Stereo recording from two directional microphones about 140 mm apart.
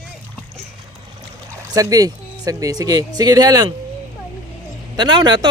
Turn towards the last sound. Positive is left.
turn(degrees=-35)  # may be behind; listen again after turning